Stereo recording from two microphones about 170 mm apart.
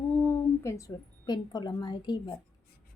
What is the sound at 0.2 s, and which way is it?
A woman's voice, 15° left (ahead or behind).